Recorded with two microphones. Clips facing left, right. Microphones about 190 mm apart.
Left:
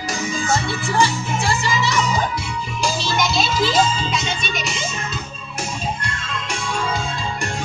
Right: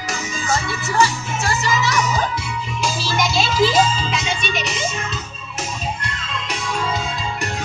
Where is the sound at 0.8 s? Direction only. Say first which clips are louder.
Right 1 dB; 30° left (ahead or behind).